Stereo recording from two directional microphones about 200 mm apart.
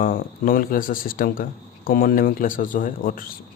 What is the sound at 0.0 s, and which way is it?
Speech, 45° left (ahead or behind).